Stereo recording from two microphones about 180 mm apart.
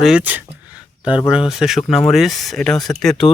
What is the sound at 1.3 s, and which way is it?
Speech, 5° right (ahead or behind).